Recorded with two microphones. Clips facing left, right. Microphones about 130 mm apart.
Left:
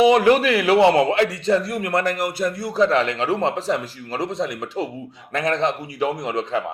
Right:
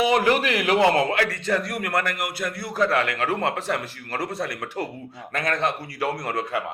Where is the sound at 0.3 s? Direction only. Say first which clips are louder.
Left 5 dB; 30° left (ahead or behind).